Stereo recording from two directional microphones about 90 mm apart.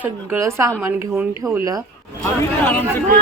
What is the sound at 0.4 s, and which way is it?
Speech, 30° right (ahead or behind).